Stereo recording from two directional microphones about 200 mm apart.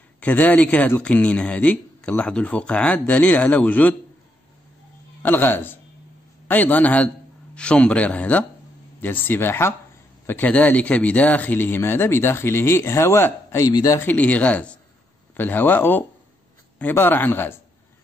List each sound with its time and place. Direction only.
0.2 s a man's voice: 10° left (ahead or behind)
5.2 s a man's voice: 10° left (ahead or behind)